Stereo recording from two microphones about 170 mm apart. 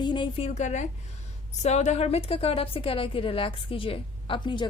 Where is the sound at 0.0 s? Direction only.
30° left (ahead or behind).